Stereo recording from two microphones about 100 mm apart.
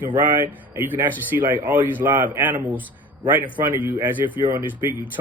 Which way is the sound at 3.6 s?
20° right (ahead or behind).